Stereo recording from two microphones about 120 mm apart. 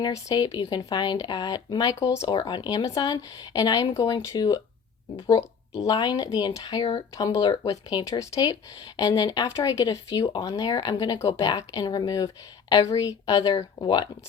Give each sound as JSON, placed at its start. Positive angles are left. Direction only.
{"t": 0.1, "sound": "speech", "side_deg": 30}
{"t": 2.2, "sound": "speech", "side_deg": 40}